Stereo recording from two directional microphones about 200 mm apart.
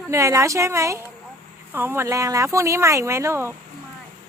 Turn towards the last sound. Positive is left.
turn(degrees=-15)  # may be behind; listen again after turning